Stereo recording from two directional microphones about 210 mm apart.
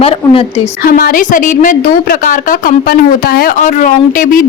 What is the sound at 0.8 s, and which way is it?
A woman's voice, 45° left (ahead or behind).